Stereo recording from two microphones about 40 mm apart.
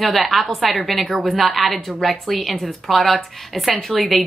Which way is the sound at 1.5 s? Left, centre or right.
Centre.